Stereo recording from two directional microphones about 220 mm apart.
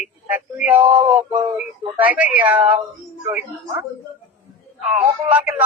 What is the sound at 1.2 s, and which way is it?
Speech, 10° right (ahead or behind).